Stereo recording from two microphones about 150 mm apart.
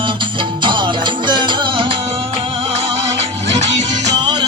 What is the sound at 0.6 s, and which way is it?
Music, 30° right (ahead or behind).